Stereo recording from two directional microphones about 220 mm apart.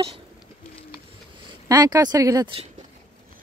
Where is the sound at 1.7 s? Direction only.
15° right (ahead or behind).